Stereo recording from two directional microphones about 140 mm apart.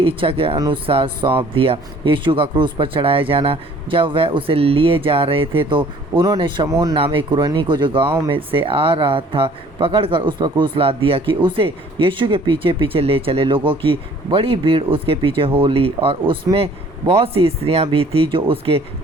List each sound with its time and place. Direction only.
0.0 s speech: 40° right (ahead or behind)
6.9 s speech: 40° right (ahead or behind)